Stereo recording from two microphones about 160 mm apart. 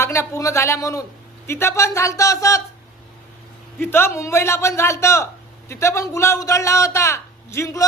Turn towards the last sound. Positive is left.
turn(degrees=20)  # may be behind; listen again after turning